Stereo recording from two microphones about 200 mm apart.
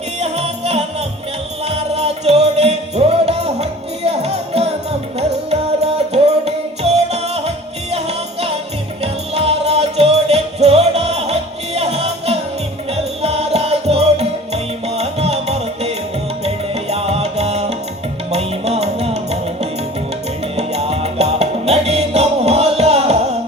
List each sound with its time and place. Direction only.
0.2 s music: 30° right (ahead or behind)
20.6 s music: 30° right (ahead or behind)